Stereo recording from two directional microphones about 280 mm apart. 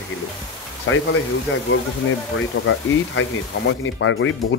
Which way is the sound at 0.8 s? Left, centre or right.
Left.